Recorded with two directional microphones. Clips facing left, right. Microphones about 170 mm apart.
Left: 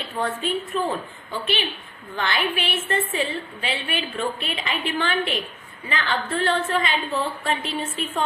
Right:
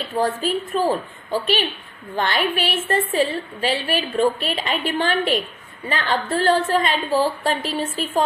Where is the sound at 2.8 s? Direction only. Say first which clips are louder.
Right 7 dB; 35° right (ahead or behind).